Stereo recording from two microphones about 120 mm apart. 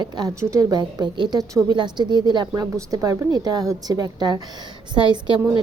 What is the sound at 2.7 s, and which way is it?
A woman's voice, 25° right (ahead or behind).